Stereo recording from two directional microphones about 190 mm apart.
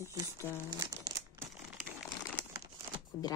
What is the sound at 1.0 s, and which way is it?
Crumpling, 15° right (ahead or behind).